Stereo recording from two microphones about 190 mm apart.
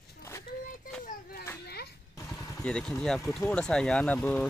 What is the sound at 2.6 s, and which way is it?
Speech, 5° left (ahead or behind).